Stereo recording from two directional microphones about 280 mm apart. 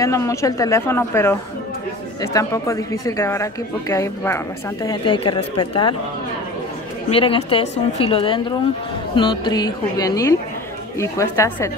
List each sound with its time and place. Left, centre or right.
0.0 s speech: centre
2.3 s speech: centre
7.1 s a woman's voice: centre